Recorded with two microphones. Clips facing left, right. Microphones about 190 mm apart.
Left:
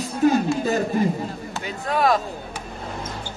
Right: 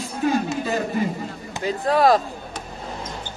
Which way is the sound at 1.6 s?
35° right (ahead or behind).